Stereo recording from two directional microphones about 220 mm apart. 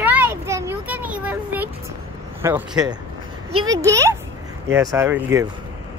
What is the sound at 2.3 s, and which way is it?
Speech, 10° right (ahead or behind).